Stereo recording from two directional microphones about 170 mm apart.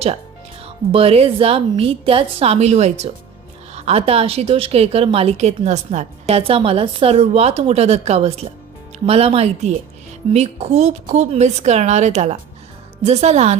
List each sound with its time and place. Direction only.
0.6 s a woman's voice: 35° right (ahead or behind)